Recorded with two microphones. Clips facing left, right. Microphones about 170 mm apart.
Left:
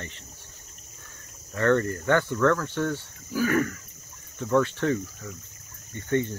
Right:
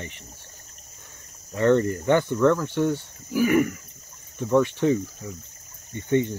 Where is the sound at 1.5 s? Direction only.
15° right (ahead or behind).